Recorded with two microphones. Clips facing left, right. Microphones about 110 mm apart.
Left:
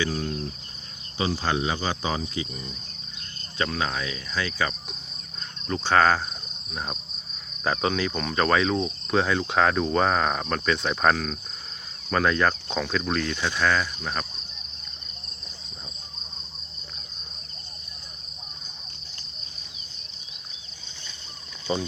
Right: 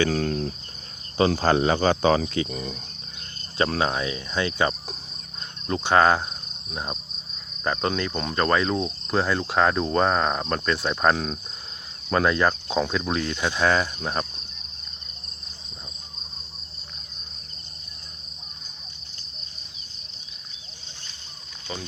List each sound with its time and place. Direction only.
0.0 s cricket: 60° right (ahead or behind)
1.1 s cricket: 50° right (ahead or behind); by 2.7 s 85° right
3.6 s cricket: 35° right (ahead or behind)
5.7 s cricket: 15° right (ahead or behind)
7.6 s cricket: centre (ahead or behind); by 13.7 s 20° right (ahead or behind)
13.7 s cricket: 30° right (ahead or behind)